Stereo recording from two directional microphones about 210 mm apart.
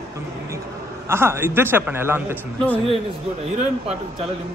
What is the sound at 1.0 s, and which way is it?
A man's voice, 10° right (ahead or behind).